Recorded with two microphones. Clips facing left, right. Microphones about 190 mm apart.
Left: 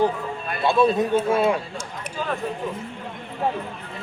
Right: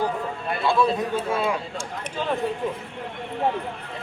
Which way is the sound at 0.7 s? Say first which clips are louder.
Left 4 dB; 25° left (ahead or behind).